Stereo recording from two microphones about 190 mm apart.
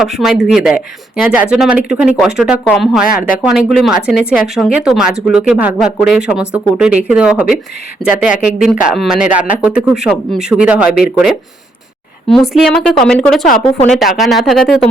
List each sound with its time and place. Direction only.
0.0 s speech: centre (ahead or behind)
13.6 s speech: 30° left (ahead or behind)
13.9 s speech: centre (ahead or behind)